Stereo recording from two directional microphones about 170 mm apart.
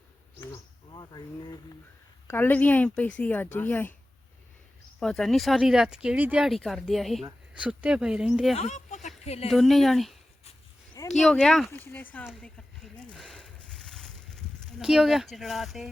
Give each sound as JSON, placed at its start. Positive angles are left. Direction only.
{"t": 0.9, "sound": "speech", "side_deg": 25}
{"t": 2.2, "sound": "a woman's voice", "side_deg": 10}
{"t": 4.9, "sound": "speech", "side_deg": 0}
{"t": 8.5, "sound": "speech", "side_deg": 45}
{"t": 9.5, "sound": "speech", "side_deg": 0}
{"t": 11.2, "sound": "a woman's voice", "side_deg": 5}
{"t": 13.1, "sound": "a sound", "side_deg": 0}